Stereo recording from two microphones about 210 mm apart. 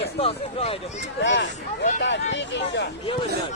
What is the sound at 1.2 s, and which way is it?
Speech, 60° left (ahead or behind).